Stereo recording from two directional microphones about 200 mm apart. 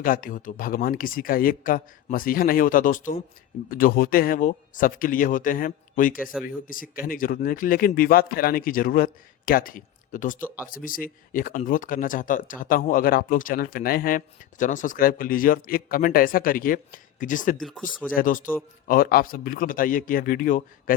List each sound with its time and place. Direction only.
0.0 s speech: 45° left (ahead or behind)
17.6 s speech: centre (ahead or behind)
17.8 s speech: 45° left (ahead or behind)